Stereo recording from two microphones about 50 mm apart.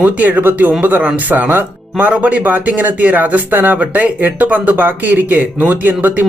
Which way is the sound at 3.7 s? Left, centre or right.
Right.